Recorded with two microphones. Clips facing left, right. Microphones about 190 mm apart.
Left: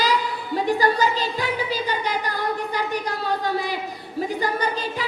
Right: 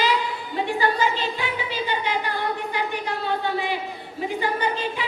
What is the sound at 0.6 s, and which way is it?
Music, 40° left (ahead or behind).